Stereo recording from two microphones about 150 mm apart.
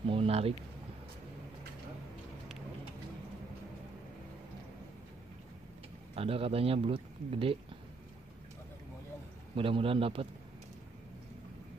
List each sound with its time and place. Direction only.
0.0 s a man's voice: 35° right (ahead or behind)
6.1 s a man's voice: 40° right (ahead or behind)
9.6 s a man's voice: 40° right (ahead or behind)